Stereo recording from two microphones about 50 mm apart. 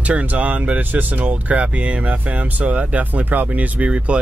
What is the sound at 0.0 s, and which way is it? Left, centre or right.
Speech, right.